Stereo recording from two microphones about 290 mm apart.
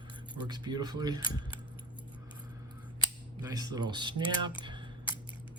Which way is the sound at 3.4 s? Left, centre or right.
Centre.